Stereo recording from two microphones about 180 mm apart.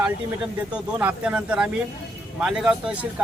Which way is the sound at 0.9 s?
5° right (ahead or behind).